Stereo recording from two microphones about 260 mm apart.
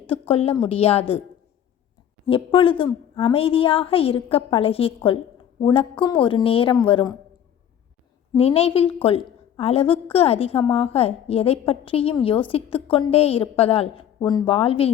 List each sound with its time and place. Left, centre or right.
0.1 s a woman's voice: left
2.2 s a woman's voice: left
8.4 s a woman's voice: left